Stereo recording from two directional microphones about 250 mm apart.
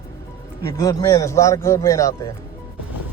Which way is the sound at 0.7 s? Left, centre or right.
Centre.